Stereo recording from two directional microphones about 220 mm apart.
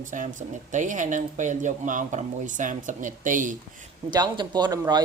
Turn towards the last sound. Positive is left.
turn(degrees=-20)  # may be behind; listen again after turning